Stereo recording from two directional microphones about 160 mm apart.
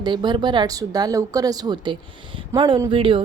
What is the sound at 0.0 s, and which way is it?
Speech, 30° right (ahead or behind).